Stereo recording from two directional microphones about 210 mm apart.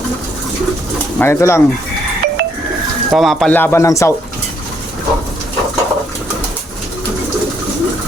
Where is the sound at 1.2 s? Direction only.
10° left (ahead or behind).